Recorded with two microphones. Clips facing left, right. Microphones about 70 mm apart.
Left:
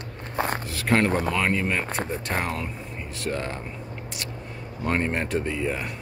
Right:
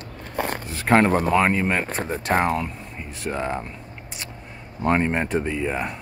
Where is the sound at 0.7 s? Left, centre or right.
Right.